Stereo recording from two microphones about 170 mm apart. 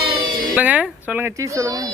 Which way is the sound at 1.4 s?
20° right (ahead or behind).